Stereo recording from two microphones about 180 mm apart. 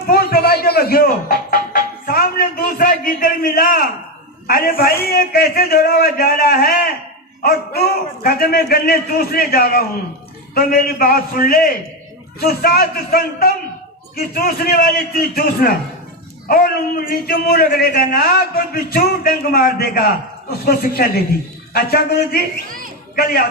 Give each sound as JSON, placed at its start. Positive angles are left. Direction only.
{"t": 0.1, "sound": "music", "side_deg": 60}
{"t": 4.4, "sound": "a man's voice", "side_deg": 55}